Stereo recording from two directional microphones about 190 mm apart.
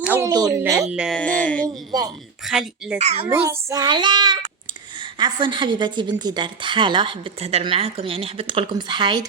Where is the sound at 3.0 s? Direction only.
35° right (ahead or behind).